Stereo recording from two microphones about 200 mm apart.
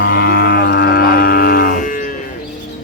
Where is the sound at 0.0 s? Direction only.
50° left (ahead or behind).